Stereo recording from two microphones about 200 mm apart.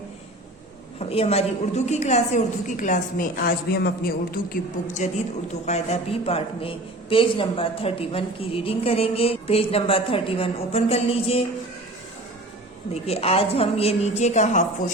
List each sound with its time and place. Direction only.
0.9 s a woman's voice: 30° left (ahead or behind); by 5.0 s 45° left (ahead or behind)
5.6 s a woman's voice: 35° left (ahead or behind)
12.9 s a woman's voice: 30° left (ahead or behind)